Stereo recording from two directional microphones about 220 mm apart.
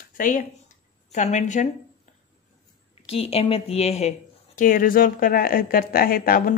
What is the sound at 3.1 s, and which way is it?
A woman's voice, 25° left (ahead or behind).